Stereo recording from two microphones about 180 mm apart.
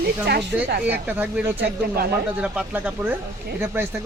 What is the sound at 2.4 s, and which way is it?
Speech, 5° right (ahead or behind).